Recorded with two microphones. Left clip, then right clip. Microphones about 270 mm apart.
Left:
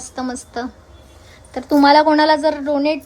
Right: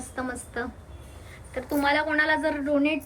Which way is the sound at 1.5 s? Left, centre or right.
Left.